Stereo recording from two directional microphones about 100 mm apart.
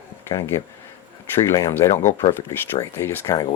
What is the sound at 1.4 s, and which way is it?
Speech, 30° left (ahead or behind).